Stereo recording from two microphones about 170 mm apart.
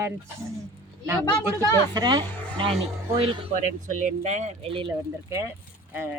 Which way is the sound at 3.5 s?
50° right (ahead or behind).